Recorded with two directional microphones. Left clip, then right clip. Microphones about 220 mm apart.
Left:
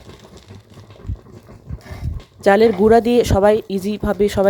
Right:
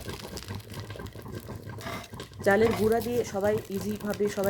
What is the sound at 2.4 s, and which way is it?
Speech, 40° left (ahead or behind).